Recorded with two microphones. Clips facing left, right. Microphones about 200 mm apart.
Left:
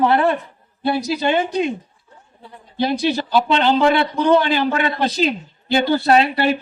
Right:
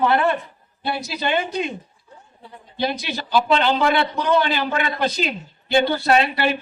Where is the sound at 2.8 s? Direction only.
30° left (ahead or behind).